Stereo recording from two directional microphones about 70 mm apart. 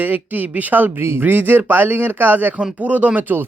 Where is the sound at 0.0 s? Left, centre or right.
Right.